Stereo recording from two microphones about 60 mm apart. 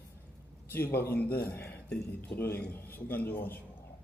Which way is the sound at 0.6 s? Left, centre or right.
Left.